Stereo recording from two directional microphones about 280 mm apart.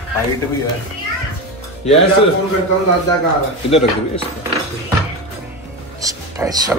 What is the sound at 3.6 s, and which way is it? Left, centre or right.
Speech, centre.